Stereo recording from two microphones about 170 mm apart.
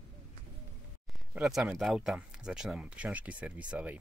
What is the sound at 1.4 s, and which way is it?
Speech, 5° right (ahead or behind).